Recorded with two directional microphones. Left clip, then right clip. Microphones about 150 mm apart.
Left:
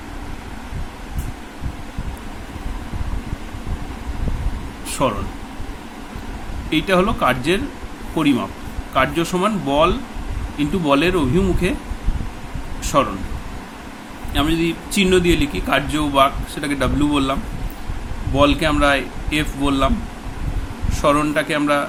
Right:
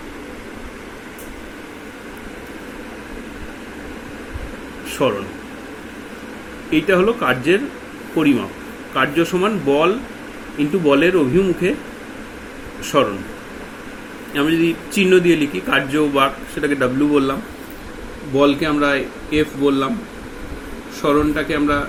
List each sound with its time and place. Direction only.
6.7 s a man's voice: 40° left (ahead or behind)
9.0 s a man's voice: 35° left (ahead or behind)
12.8 s speech: 30° left (ahead or behind)
14.3 s a man's voice: 35° left (ahead or behind)
18.3 s a man's voice: 35° left (ahead or behind)
21.0 s a man's voice: 35° left (ahead or behind)